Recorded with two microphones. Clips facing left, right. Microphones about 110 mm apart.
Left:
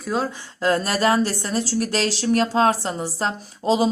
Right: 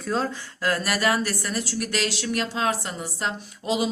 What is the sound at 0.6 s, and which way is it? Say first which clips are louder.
Speech: left 4 dB; 25° left (ahead or behind).